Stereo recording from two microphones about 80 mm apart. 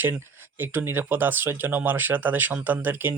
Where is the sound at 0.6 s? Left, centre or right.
Right.